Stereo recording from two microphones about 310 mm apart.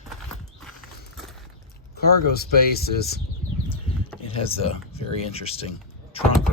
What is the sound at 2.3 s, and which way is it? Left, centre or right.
Speech, left.